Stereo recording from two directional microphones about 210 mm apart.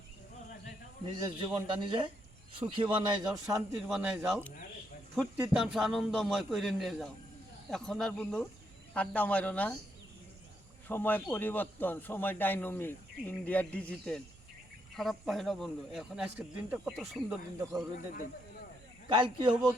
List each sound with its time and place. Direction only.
1.0 s a man's voice: 25° right (ahead or behind)
3.8 s a man's voice: 5° right (ahead or behind)
10.8 s a man's voice: 10° left (ahead or behind)
19.0 s a man's voice: 20° right (ahead or behind)